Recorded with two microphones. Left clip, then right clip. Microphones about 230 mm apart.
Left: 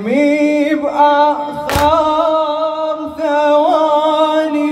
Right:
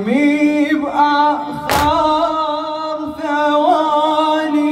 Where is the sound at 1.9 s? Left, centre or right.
Left.